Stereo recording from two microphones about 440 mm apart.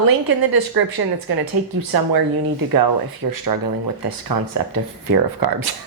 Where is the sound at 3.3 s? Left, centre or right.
Right.